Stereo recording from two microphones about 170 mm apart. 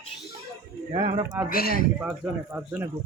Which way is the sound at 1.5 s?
60° left (ahead or behind).